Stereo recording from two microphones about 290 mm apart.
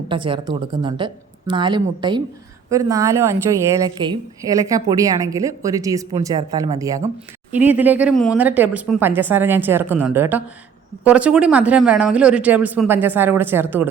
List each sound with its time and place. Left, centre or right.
0.1 s a woman's voice: centre